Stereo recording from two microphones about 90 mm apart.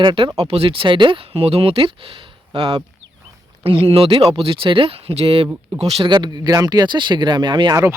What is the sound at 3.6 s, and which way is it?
Speech, 90° right.